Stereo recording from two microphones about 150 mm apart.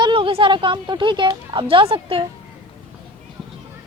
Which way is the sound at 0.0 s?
35° right (ahead or behind).